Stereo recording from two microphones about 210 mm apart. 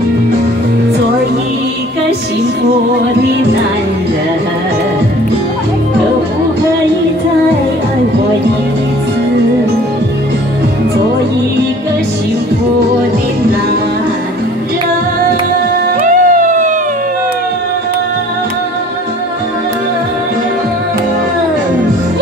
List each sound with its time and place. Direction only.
16.0 s music: 40° right (ahead or behind)